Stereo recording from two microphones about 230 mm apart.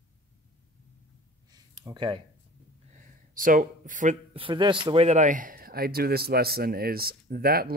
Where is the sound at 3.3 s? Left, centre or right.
Right.